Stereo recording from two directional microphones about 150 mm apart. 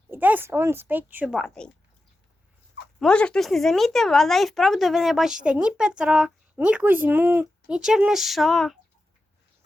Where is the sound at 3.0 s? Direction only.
5° left (ahead or behind).